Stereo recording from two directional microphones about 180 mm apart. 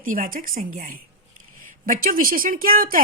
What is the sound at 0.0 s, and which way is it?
A woman's voice, 50° right (ahead or behind).